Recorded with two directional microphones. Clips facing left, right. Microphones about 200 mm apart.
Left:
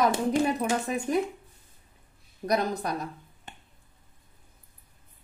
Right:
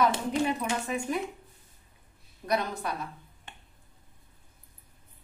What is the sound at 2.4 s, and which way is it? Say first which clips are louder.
Speech: left 3 dB; 40° left (ahead or behind).